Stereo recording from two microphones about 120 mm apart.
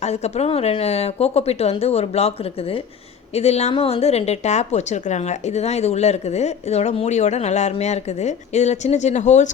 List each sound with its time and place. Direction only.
0.0 s a woman's voice: 65° left (ahead or behind); by 9.5 s 85° left